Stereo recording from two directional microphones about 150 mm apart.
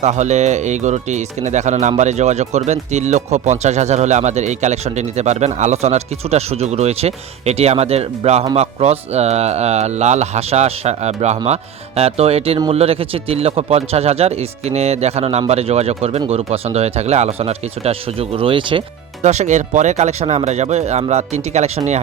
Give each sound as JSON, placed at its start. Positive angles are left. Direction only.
{"t": 0.0, "sound": "speech", "side_deg": -50}
{"t": 19.2, "sound": "speech", "side_deg": -50}